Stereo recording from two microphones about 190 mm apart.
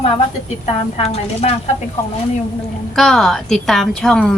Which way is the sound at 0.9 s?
35° left (ahead or behind).